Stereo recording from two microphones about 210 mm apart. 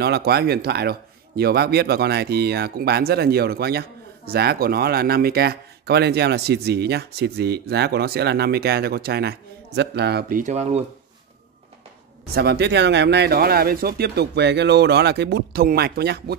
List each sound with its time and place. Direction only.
0.0 s speech: 50° right (ahead or behind)
10.4 s speech: 30° right (ahead or behind)
12.4 s speech: 50° right (ahead or behind)